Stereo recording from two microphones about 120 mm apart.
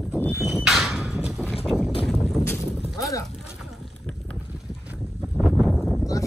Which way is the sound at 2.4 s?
20° left (ahead or behind).